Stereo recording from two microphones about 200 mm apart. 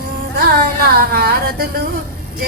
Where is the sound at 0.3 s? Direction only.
50° right (ahead or behind).